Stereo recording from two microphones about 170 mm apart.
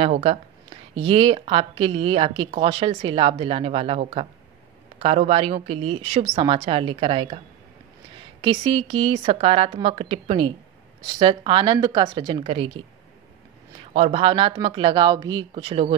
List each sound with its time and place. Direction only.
0.0 s speech: 35° right (ahead or behind)
13.9 s speech: 35° right (ahead or behind)